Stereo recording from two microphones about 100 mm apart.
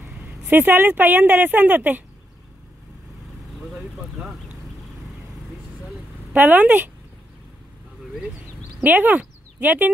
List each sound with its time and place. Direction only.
0.4 s speech: 20° right (ahead or behind)
6.3 s speech: 15° right (ahead or behind)
8.8 s speech: 15° right (ahead or behind)